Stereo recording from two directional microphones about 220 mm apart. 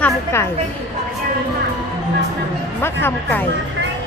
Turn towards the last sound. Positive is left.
turn(degrees=10)  # may be behind; listen again after turning